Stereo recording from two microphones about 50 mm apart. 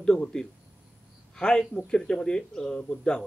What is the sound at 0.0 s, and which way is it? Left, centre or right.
A man's voice, centre.